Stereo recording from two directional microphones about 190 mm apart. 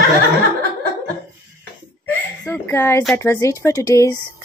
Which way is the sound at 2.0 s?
10° left (ahead or behind).